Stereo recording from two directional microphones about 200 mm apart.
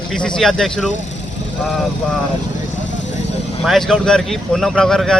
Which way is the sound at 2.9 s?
65° left (ahead or behind).